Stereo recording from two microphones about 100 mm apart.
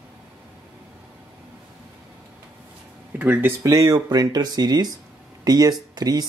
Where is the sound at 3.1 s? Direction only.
20° right (ahead or behind).